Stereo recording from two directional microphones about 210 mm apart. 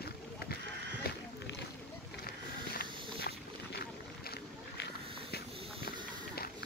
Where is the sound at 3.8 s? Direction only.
50° left (ahead or behind).